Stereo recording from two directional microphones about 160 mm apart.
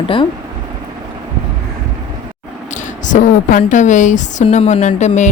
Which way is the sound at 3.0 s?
50° left (ahead or behind).